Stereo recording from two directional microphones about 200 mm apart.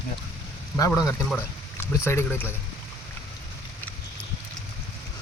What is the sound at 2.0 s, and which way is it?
Speech, 10° left (ahead or behind).